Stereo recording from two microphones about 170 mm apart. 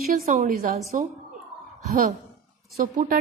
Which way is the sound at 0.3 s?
50° right (ahead or behind).